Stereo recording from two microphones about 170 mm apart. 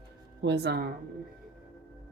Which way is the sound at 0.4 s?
80° right.